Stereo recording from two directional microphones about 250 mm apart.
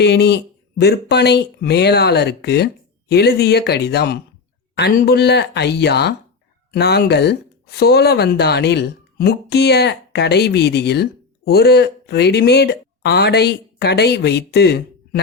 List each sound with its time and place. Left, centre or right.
0.0 s speech: left